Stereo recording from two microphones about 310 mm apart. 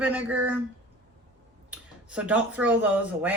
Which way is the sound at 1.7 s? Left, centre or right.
Centre.